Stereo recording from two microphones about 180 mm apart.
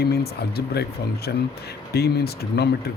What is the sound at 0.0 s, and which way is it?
Speech, 65° left (ahead or behind).